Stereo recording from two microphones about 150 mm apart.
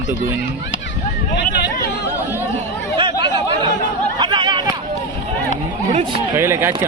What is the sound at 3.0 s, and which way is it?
Chatter, 30° right (ahead or behind).